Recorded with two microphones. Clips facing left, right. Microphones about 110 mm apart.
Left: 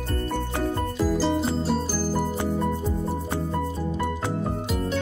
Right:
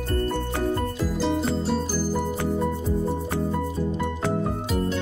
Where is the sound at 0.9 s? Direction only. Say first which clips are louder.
Left 2 dB; centre (ahead or behind).